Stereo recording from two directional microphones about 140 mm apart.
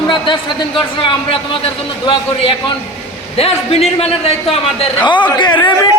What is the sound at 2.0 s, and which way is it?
A man's voice, 35° left (ahead or behind).